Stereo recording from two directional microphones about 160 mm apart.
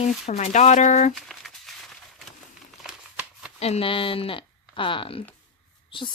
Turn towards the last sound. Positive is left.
turn(degrees=35)  # may be behind; listen again after turning